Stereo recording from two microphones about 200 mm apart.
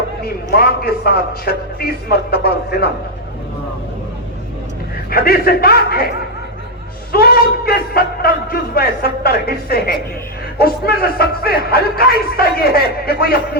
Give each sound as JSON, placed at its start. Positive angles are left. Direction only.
{"t": 0.2, "sound": "speech", "side_deg": 50}
{"t": 5.1, "sound": "speech", "side_deg": 50}